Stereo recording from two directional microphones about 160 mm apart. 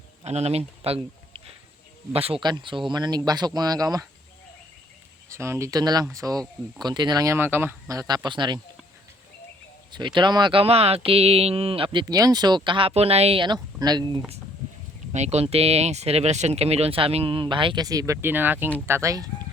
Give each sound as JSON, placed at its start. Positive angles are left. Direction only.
{"t": 0.3, "sound": "speech", "side_deg": -40}
{"t": 5.3, "sound": "speech", "side_deg": -15}
{"t": 9.9, "sound": "speech", "side_deg": -30}
{"t": 15.1, "sound": "speech", "side_deg": -45}